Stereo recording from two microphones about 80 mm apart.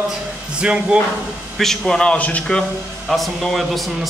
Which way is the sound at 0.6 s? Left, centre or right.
Centre.